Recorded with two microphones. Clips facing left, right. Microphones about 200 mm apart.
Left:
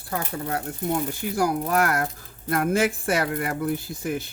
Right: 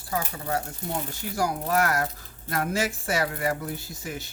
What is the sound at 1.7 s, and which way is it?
Speech, 55° left (ahead or behind).